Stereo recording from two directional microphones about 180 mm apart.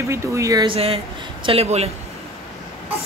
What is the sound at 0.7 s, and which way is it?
Speech, 35° right (ahead or behind).